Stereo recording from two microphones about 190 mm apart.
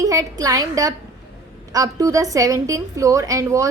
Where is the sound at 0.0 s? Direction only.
20° right (ahead or behind).